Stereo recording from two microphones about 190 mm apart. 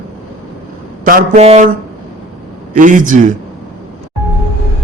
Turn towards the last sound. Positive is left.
turn(degrees=-45)  # may be behind; listen again after turning